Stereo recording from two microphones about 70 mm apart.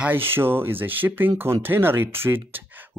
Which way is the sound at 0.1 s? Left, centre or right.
Right.